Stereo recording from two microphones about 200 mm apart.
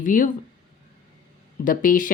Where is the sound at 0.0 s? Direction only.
40° left (ahead or behind).